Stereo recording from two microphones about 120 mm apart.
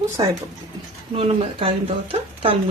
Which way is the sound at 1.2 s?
50° right (ahead or behind).